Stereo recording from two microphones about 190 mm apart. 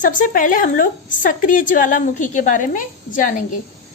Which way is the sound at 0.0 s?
45° left (ahead or behind).